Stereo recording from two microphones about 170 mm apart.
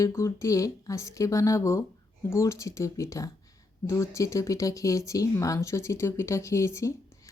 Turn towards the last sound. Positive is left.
turn(degrees=15)  # may be behind; listen again after turning